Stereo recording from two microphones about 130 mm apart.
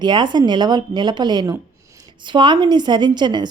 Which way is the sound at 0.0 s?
35° right (ahead or behind).